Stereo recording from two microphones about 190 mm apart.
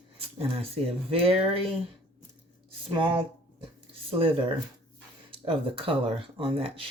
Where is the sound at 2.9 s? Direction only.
25° right (ahead or behind).